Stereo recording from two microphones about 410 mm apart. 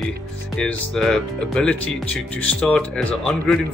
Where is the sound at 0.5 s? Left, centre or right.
Centre.